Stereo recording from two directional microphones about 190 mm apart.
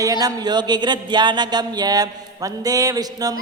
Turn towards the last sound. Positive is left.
turn(degrees=-20)  # may be behind; listen again after turning